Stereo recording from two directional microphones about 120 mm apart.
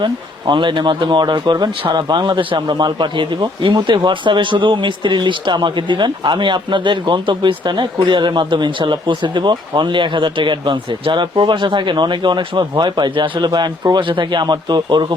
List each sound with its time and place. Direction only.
0.0 s speech: 40° right (ahead or behind)